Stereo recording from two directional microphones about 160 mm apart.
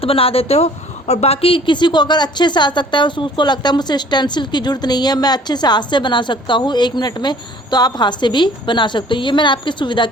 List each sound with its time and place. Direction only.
0.0 s a woman's voice: 35° left (ahead or behind)